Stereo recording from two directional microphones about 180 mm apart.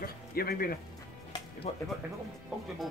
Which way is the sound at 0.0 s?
55° left (ahead or behind).